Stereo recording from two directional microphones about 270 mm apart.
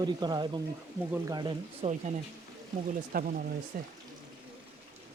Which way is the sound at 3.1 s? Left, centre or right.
Right.